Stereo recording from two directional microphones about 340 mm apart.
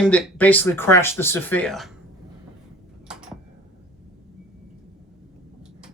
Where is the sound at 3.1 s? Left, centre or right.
Centre.